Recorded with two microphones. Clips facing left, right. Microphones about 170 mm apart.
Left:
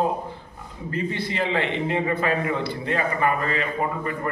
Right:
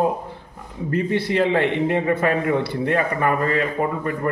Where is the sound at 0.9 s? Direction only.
65° right (ahead or behind).